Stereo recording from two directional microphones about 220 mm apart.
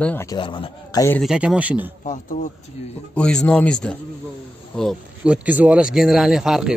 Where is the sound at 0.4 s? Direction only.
20° left (ahead or behind).